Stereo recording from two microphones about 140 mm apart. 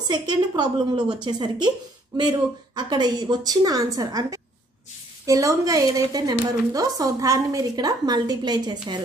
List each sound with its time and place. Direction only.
0.1 s a woman's voice: 30° right (ahead or behind)